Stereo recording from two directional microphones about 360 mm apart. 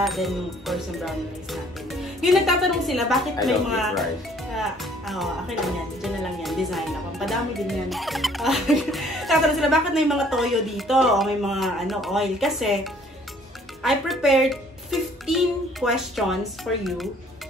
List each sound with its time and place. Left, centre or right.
0.0 s a child's voice: centre